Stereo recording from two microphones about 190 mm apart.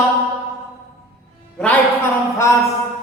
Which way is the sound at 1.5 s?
5° left (ahead or behind).